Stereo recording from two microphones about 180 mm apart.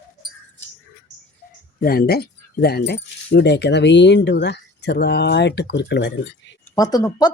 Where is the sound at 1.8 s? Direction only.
55° left (ahead or behind); by 6.6 s 80° left.